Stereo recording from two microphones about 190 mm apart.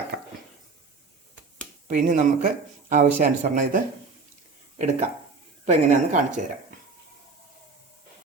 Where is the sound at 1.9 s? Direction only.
40° right (ahead or behind).